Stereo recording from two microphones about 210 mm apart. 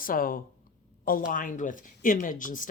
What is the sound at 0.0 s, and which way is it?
Speech, 40° left (ahead or behind).